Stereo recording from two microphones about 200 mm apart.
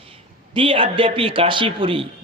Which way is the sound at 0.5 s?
25° right (ahead or behind).